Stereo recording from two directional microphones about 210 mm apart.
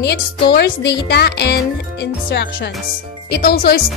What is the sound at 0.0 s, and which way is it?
Speech, 50° left (ahead or behind).